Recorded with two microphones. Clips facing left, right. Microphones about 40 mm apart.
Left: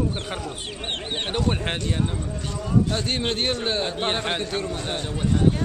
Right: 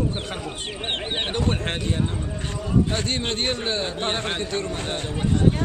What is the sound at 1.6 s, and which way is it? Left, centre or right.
Speech, centre.